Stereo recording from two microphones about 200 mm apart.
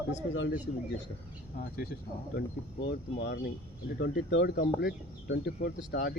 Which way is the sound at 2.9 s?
55° left (ahead or behind).